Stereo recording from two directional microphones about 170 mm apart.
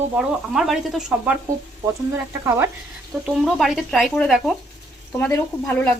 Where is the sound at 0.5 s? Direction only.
Centre (ahead or behind).